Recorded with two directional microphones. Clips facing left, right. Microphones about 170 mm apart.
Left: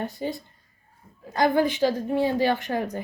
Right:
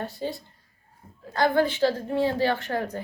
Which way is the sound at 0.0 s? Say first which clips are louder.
Left 2 dB; 15° left (ahead or behind).